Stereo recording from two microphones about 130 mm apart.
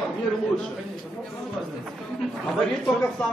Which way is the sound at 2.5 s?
Centre (ahead or behind).